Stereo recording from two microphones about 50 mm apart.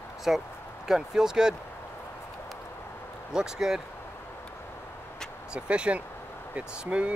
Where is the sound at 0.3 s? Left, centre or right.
Centre.